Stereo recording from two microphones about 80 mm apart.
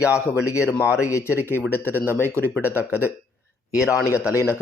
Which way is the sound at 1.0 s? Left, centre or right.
Left.